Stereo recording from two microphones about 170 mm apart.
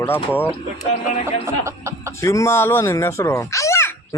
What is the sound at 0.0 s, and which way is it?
Speech, 10° left (ahead or behind).